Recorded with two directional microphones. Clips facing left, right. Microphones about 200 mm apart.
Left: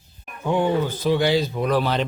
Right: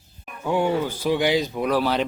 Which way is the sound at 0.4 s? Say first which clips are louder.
Left 1 dB; 10° right (ahead or behind).